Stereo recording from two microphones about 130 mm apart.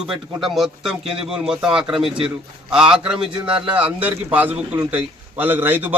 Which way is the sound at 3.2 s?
40° right (ahead or behind).